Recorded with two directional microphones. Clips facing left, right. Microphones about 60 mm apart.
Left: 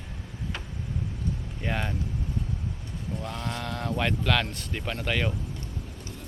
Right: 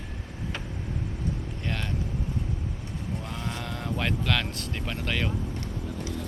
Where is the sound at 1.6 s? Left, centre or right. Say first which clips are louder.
Left 5 dB; centre.